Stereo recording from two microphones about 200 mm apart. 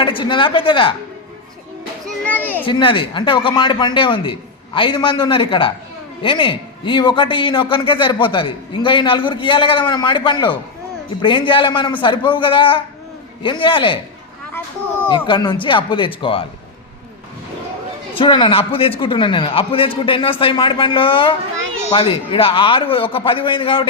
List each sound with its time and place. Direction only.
0.0 s a man's voice: 25° left (ahead or behind)
2.0 s children playing: 5° left (ahead or behind)
2.6 s a man's voice: 25° left (ahead or behind)
15.1 s a man's voice: 20° left (ahead or behind)
18.1 s a man's voice: 25° left (ahead or behind)